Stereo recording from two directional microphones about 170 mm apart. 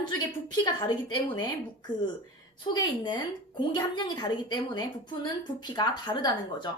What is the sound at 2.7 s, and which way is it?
A woman's voice, 25° left (ahead or behind).